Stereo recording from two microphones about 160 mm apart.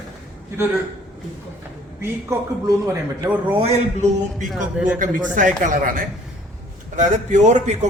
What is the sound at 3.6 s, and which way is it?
Speech, 50° right (ahead or behind).